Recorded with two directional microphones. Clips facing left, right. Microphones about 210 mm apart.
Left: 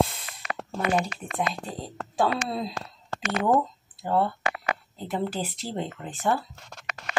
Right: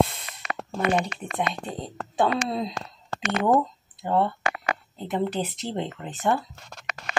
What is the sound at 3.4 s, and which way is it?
Speech, centre (ahead or behind).